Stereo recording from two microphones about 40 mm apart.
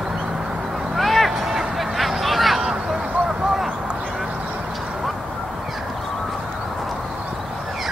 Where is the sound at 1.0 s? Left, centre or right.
Centre.